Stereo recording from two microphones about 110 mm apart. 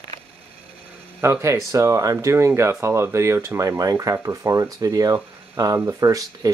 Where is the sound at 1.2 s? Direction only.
25° right (ahead or behind).